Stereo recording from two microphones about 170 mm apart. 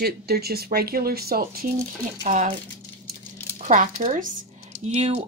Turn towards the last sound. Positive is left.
turn(degrees=-40)  # may be behind; listen again after turning